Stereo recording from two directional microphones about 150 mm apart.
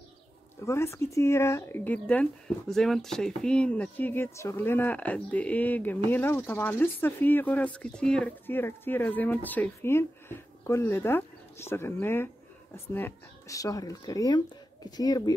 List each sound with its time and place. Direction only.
0.6 s speech: 15° left (ahead or behind)